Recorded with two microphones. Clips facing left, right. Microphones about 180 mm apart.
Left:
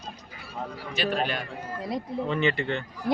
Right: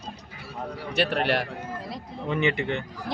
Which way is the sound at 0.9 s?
65° right (ahead or behind).